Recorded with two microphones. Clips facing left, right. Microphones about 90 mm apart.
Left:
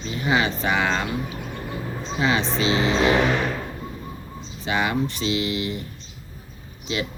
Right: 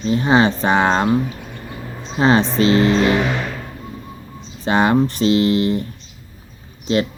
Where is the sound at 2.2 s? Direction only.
40° right (ahead or behind).